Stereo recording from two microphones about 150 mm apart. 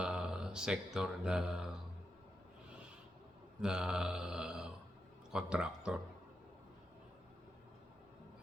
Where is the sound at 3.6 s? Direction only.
5° right (ahead or behind).